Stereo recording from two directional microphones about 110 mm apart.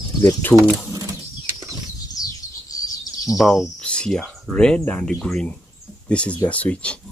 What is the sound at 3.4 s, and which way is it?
Speech, centre (ahead or behind).